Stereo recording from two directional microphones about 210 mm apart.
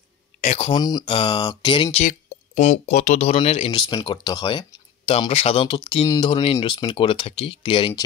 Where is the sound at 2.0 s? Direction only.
40° left (ahead or behind).